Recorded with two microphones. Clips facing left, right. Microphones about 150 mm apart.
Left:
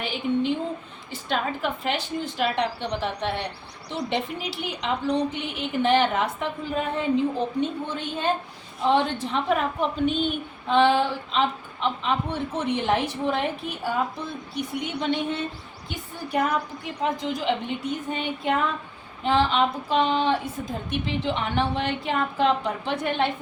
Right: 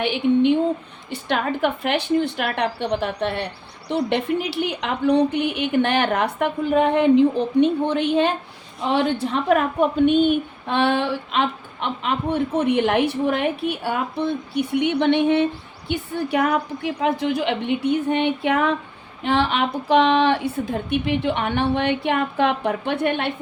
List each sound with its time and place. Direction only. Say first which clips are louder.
0.0 s a woman's voice: right 7 dB; 70° right (ahead or behind)